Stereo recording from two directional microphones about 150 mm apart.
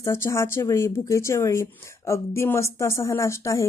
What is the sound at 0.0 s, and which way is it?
A woman's voice, 20° left (ahead or behind).